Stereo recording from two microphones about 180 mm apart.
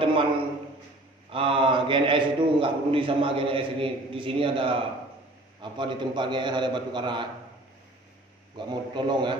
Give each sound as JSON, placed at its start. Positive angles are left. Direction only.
{"t": 0.0, "sound": "a man's voice", "side_deg": -30}
{"t": 1.3, "sound": "a man's voice", "side_deg": -30}
{"t": 8.5, "sound": "a man's voice", "side_deg": -25}